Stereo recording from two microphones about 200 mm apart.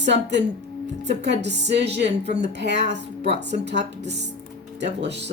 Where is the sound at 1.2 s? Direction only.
60° right (ahead or behind).